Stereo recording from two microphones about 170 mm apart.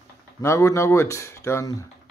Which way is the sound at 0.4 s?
15° left (ahead or behind).